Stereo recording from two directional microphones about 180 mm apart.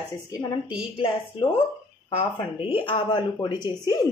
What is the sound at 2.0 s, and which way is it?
Speech, 30° left (ahead or behind).